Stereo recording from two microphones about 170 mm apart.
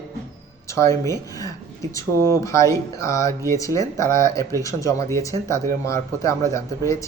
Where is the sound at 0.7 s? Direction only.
15° left (ahead or behind).